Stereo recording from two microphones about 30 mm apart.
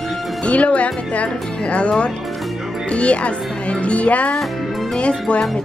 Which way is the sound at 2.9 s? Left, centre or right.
Left.